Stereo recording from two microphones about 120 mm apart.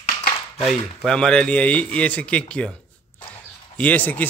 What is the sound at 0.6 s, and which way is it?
A man's voice, 5° left (ahead or behind).